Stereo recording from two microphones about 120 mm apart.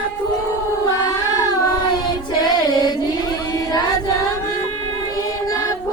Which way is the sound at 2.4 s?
35° left (ahead or behind).